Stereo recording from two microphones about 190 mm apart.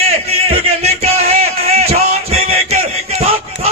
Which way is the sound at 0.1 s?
35° right (ahead or behind).